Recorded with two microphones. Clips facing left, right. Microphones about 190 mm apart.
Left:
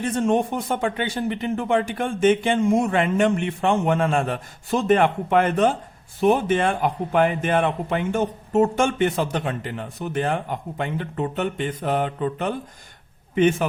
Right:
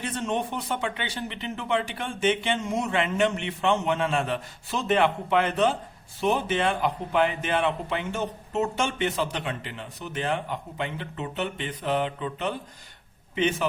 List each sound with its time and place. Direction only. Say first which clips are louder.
0.0 s a man's voice: left 8 dB; 45° left (ahead or behind)